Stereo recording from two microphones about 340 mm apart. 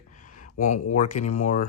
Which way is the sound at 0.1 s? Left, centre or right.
Left.